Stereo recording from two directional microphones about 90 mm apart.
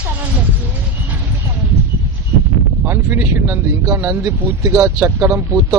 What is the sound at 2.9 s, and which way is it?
Speech, 20° right (ahead or behind).